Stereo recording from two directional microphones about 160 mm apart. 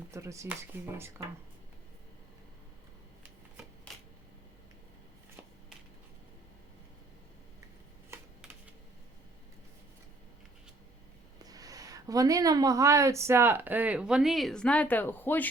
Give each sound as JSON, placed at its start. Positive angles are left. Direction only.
{"t": 0.1, "sound": "speech", "side_deg": -20}
{"t": 3.9, "sound": "typewriter", "side_deg": 5}
{"t": 11.4, "sound": "speech", "side_deg": -20}